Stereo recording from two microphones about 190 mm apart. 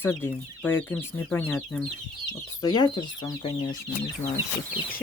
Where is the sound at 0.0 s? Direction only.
10° left (ahead or behind).